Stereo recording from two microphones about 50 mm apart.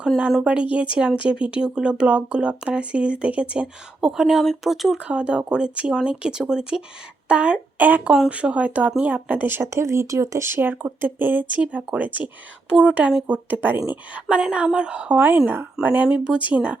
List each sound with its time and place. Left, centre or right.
0.3 s speech: centre
4.0 s speech: centre
5.0 s speech: right
7.8 s speech: right
9.6 s speech: right
10.4 s speech: right
14.5 s speech: right
15.8 s speech: right
16.0 s speech: centre